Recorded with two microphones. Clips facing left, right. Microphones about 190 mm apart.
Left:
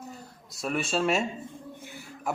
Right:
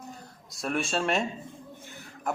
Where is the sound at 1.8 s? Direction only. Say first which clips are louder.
Right 1 dB; 10° left (ahead or behind).